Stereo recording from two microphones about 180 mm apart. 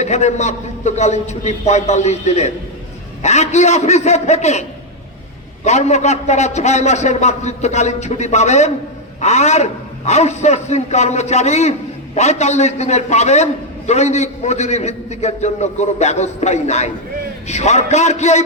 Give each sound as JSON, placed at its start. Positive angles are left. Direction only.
{"t": 0.0, "sound": "a man's voice", "side_deg": 40}
{"t": 5.6, "sound": "a man's voice", "side_deg": 40}